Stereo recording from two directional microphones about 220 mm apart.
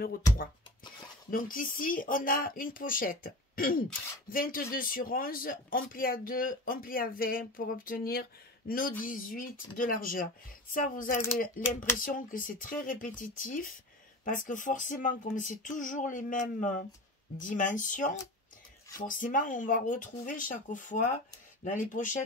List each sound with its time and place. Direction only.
1.3 s speech: 40° left (ahead or behind)